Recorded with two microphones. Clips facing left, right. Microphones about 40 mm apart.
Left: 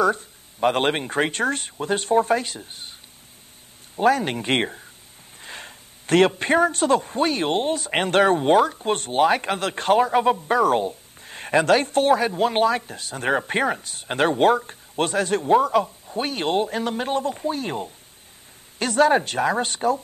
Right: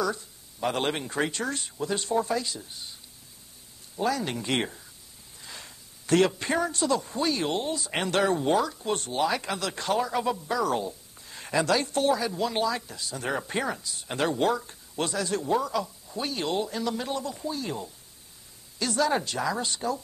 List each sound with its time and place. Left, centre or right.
0.0 s a man's voice: left